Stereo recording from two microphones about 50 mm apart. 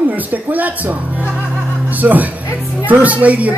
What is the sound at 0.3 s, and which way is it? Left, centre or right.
Music, right.